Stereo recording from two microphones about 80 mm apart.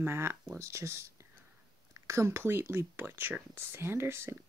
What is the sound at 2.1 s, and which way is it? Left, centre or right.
Speech, right.